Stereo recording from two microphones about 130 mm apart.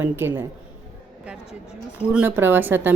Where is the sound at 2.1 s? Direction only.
10° right (ahead or behind).